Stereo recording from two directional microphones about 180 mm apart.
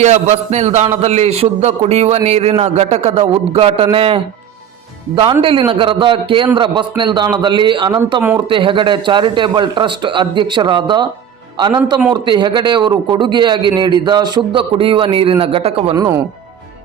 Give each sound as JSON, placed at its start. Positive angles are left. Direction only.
{"t": 0.0, "sound": "a man's voice", "side_deg": -40}